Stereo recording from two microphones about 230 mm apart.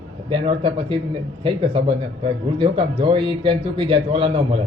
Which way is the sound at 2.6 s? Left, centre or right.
Right.